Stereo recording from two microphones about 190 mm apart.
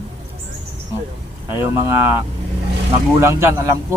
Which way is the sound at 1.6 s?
10° right (ahead or behind).